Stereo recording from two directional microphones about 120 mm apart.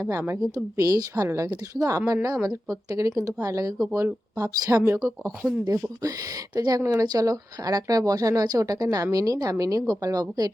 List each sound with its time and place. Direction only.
0.0 s speech: 20° right (ahead or behind)